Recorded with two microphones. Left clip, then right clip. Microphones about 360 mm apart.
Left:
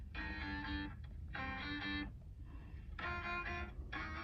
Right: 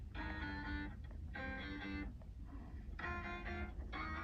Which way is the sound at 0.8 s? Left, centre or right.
Left.